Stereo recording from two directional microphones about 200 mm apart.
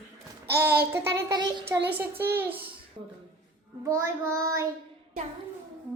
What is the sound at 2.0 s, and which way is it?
Speech, 10° right (ahead or behind).